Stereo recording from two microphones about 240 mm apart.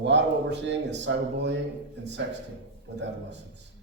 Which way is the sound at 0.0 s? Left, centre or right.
Right.